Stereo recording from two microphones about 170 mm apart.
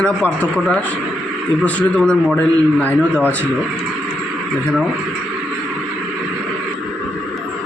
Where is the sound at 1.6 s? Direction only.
10° left (ahead or behind).